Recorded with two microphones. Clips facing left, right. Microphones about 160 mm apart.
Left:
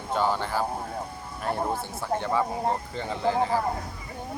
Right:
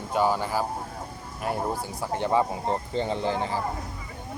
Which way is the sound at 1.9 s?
20° right (ahead or behind).